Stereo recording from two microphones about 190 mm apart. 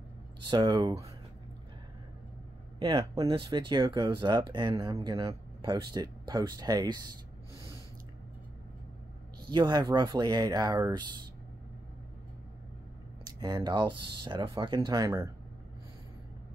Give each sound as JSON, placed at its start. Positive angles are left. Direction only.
{"t": 0.5, "sound": "speech", "side_deg": -20}
{"t": 2.8, "sound": "speech", "side_deg": -20}
{"t": 9.5, "sound": "speech", "side_deg": -20}
{"t": 13.4, "sound": "speech", "side_deg": -20}